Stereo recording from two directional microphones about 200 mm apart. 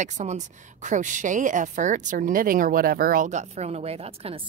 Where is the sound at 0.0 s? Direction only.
35° right (ahead or behind).